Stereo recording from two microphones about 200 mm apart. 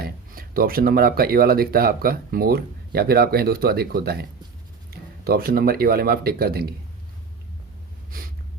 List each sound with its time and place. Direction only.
0.0 s speech: 45° right (ahead or behind)
8.1 s snort: 45° right (ahead or behind)